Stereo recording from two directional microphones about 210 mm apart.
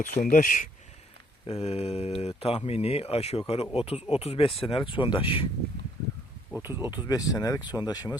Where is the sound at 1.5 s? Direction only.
30° left (ahead or behind).